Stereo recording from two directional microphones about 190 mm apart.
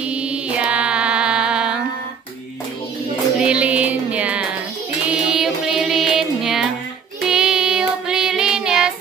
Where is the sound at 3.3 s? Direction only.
5° right (ahead or behind).